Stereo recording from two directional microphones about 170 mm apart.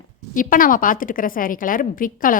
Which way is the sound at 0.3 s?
55° left (ahead or behind).